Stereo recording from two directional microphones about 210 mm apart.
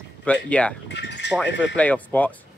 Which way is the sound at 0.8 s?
55° left (ahead or behind).